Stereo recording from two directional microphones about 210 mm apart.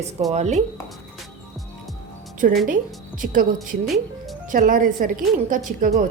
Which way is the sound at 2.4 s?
40° right (ahead or behind).